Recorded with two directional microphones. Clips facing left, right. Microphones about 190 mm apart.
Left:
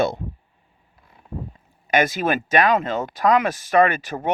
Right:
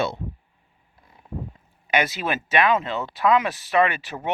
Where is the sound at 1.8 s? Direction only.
45° left (ahead or behind).